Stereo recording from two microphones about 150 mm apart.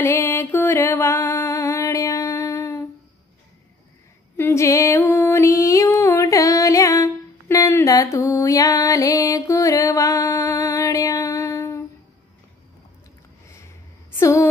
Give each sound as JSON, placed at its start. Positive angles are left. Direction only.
{"t": 0.0, "sound": "music", "side_deg": 15}
{"t": 4.4, "sound": "music", "side_deg": 15}
{"t": 14.1, "sound": "a sound", "side_deg": 20}